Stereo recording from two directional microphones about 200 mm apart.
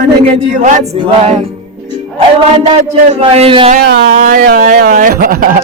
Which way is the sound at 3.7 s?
45° right (ahead or behind).